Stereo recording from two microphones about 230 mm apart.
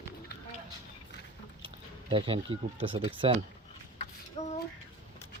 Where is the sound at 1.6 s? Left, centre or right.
Right.